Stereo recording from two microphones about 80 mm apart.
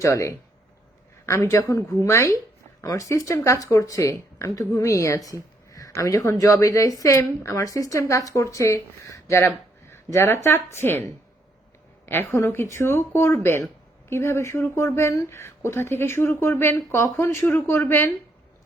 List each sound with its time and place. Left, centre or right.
0.0 s a woman's voice: left